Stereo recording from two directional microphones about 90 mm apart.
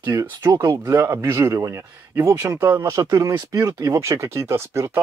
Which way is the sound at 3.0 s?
40° right (ahead or behind).